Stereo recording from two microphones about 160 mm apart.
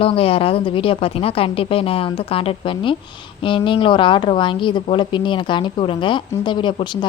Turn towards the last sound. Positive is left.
turn(degrees=30)  # may be behind; listen again after turning